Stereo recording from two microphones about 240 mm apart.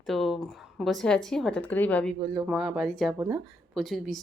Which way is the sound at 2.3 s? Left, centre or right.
Centre.